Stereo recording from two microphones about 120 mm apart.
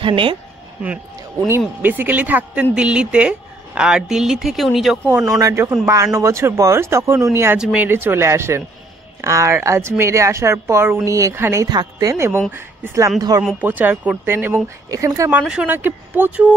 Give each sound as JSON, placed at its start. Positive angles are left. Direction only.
{"t": 0.0, "sound": "speech", "side_deg": -45}
{"t": 1.8, "sound": "speech", "side_deg": -15}
{"t": 5.0, "sound": "speech", "side_deg": -25}
{"t": 7.5, "sound": "speech", "side_deg": -10}
{"t": 11.7, "sound": "speech", "side_deg": -35}
{"t": 13.4, "sound": "speech", "side_deg": -10}
{"t": 15.4, "sound": "speech", "side_deg": -10}